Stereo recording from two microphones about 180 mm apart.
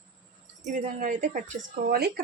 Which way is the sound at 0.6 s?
45° right (ahead or behind).